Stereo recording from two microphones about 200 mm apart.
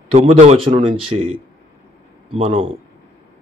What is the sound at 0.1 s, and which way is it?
A man's voice, 30° right (ahead or behind).